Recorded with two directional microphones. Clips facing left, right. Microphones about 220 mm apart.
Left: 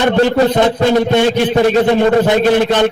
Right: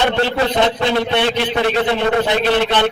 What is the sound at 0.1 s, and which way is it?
A man's voice, 45° left (ahead or behind).